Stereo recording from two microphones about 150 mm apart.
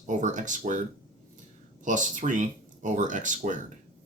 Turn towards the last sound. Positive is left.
turn(degrees=-60)  # may be behind; listen again after turning